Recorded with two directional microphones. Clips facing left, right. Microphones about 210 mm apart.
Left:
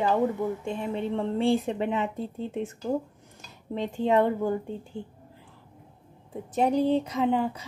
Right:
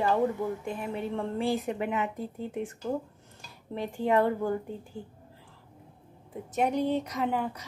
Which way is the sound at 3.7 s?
20° left (ahead or behind).